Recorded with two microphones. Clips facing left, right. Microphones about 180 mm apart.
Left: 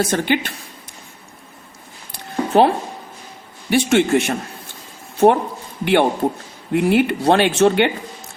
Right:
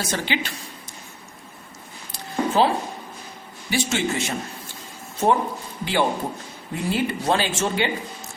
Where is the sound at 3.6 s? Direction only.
60° left (ahead or behind).